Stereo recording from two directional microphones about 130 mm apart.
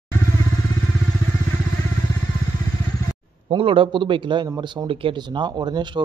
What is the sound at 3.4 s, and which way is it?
A man's voice, 45° right (ahead or behind).